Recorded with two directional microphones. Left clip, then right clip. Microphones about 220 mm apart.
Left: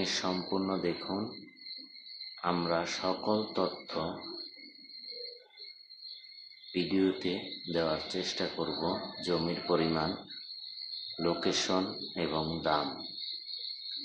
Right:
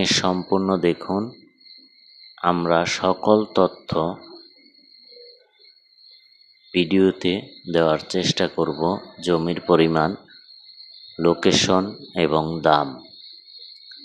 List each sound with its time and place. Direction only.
0.0 s speech: 40° right (ahead or behind)
2.4 s speech: 40° right (ahead or behind)
6.7 s speech: 40° right (ahead or behind)
11.2 s speech: 40° right (ahead or behind)